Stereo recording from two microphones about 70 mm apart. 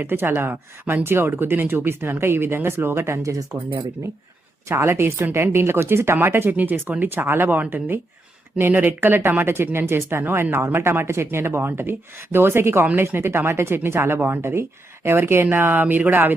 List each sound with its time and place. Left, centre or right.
0.0 s speech: right
4.7 s speech: right